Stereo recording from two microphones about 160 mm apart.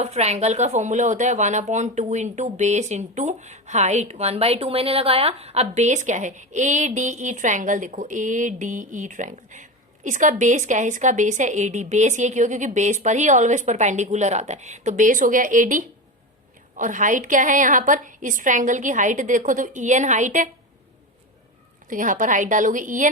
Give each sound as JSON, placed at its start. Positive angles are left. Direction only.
{"t": 0.0, "sound": "speech", "side_deg": -45}
{"t": 21.8, "sound": "a woman's voice", "side_deg": -55}